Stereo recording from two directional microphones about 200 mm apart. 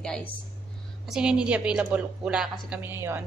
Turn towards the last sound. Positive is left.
turn(degrees=-10)  # may be behind; listen again after turning